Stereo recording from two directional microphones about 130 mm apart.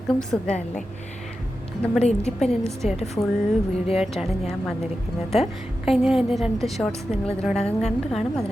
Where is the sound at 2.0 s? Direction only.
55° left (ahead or behind).